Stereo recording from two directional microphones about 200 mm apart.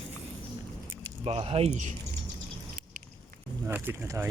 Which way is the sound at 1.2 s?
30° right (ahead or behind).